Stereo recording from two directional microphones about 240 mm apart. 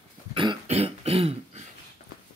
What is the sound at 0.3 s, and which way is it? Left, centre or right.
Throat clearing, right.